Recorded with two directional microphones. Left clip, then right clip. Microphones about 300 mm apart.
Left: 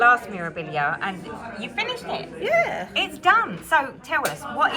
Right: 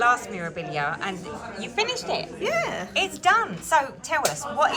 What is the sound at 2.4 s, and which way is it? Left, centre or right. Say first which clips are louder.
Speech: left 7 dB; right.